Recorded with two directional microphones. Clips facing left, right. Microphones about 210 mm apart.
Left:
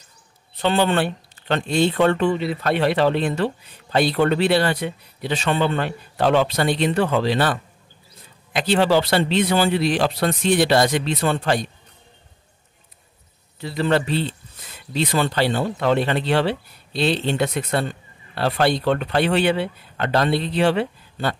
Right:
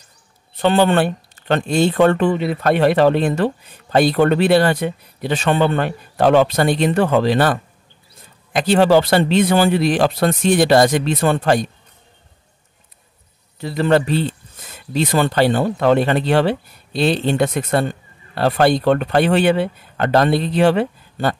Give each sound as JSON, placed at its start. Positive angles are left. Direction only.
{"t": 0.6, "sound": "speech", "side_deg": -50}
{"t": 8.5, "sound": "speech", "side_deg": -45}
{"t": 13.6, "sound": "speech", "side_deg": -50}